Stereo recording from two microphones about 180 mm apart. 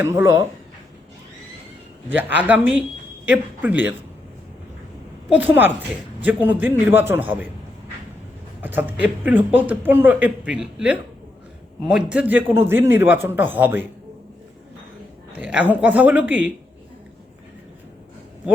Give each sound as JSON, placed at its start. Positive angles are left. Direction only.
{"t": 0.0, "sound": "speech", "side_deg": -15}
{"t": 2.0, "sound": "speech", "side_deg": -10}
{"t": 5.3, "sound": "speech", "side_deg": -10}
{"t": 8.6, "sound": "speech", "side_deg": -10}
{"t": 15.4, "sound": "speech", "side_deg": -10}